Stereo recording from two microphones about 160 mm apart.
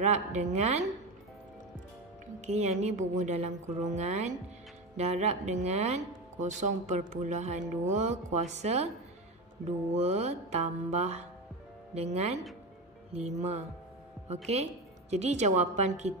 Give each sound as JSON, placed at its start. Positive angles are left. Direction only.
{"t": 0.0, "sound": "speech", "side_deg": -45}
{"t": 2.4, "sound": "speech", "side_deg": -45}